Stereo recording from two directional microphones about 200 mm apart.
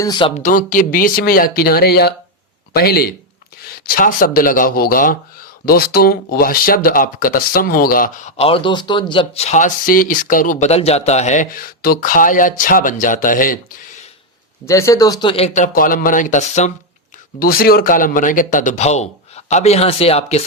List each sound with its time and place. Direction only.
0.0 s speech: 25° left (ahead or behind)
0.4 s speech: 40° left (ahead or behind)
14.6 s a man's voice: 15° left (ahead or behind); by 16.7 s 35° left (ahead or behind)
17.4 s a man's voice: 45° left (ahead or behind); by 20.4 s 30° left (ahead or behind)